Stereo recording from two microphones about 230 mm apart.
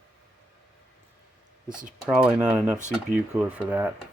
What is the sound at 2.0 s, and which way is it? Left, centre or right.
Speech, centre.